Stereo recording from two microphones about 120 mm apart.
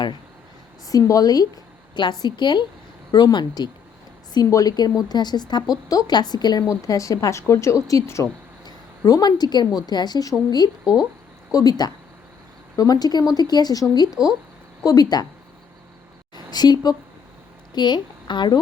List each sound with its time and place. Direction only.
0.9 s a woman's voice: 30° left (ahead or behind)
11.5 s speech: 30° left (ahead or behind)
16.3 s a sound: 35° left (ahead or behind)
17.7 s speech: 40° left (ahead or behind)